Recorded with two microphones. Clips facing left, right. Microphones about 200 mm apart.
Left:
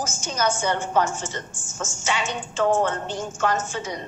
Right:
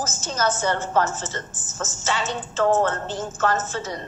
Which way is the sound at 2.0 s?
15° left (ahead or behind).